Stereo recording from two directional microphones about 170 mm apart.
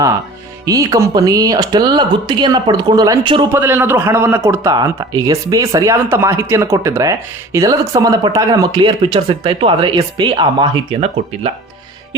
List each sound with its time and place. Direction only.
0.6 s a man's voice: 20° right (ahead or behind)
3.5 s a man's voice: 15° right (ahead or behind); by 11.5 s 30° right (ahead or behind)